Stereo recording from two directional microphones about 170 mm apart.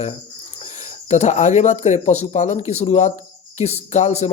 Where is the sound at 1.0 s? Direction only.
40° left (ahead or behind).